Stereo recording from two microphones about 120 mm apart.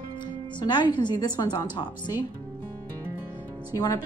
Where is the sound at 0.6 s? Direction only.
40° left (ahead or behind).